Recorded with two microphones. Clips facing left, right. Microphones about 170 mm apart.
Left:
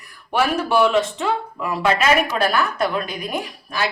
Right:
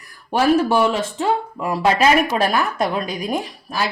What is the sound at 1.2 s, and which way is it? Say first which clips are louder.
Speech: right 3 dB; 35° right (ahead or behind).